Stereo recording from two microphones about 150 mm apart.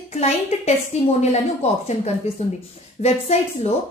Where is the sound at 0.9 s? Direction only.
45° left (ahead or behind).